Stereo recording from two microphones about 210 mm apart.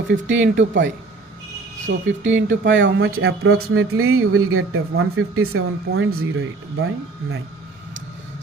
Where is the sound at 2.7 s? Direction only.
65° right (ahead or behind).